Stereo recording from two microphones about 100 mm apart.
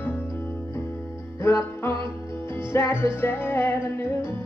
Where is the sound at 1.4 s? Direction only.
25° left (ahead or behind).